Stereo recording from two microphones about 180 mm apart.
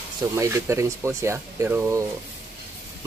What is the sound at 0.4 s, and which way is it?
Speech, 15° right (ahead or behind).